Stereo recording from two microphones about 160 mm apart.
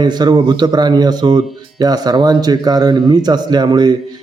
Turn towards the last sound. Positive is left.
turn(degrees=-25)  # may be behind; listen again after turning